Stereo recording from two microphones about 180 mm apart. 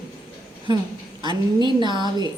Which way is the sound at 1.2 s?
25° right (ahead or behind).